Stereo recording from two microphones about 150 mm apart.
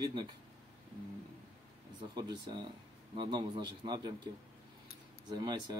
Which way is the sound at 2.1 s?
30° right (ahead or behind).